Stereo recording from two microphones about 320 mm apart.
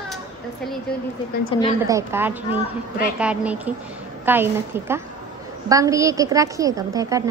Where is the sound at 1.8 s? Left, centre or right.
Centre.